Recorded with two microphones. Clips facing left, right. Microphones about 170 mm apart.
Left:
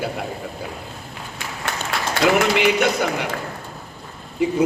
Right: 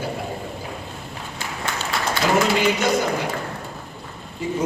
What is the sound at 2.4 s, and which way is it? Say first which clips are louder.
Speech: left 2 dB; 70° left (ahead or behind).